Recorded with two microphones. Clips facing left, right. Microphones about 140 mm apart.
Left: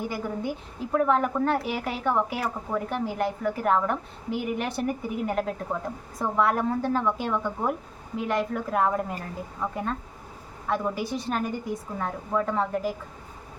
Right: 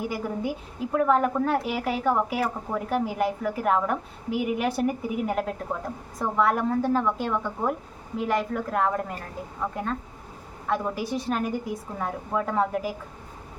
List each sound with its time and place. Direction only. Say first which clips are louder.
0.0 s a woman's voice: right 1 dB; 10° right (ahead or behind)